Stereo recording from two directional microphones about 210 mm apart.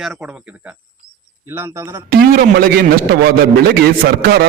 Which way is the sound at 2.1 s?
45° right (ahead or behind).